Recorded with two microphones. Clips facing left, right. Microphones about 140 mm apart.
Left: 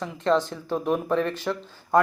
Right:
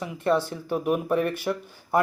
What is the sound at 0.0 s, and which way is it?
Speech, 10° right (ahead or behind).